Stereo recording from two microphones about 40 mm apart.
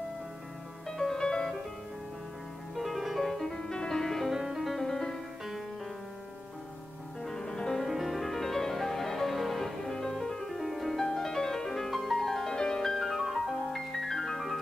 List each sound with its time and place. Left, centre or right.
0.8 s music: centre
2.8 s music: centre
3.5 s music: centre
4.3 s music: centre
4.8 s music: centre
7.2 s music: centre
7.8 s music: centre
9.8 s music: centre
10.6 s music: centre
11.1 s music: centre
13.0 s music: centre
13.7 s music: centre